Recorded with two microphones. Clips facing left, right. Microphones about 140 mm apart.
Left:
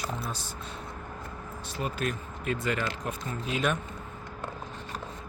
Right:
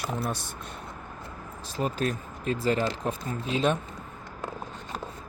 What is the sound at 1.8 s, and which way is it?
Speech, 35° right (ahead or behind).